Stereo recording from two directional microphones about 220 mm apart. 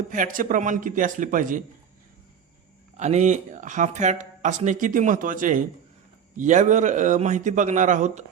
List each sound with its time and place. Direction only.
0.1 s speech: 35° right (ahead or behind)
3.0 s speech: 30° right (ahead or behind)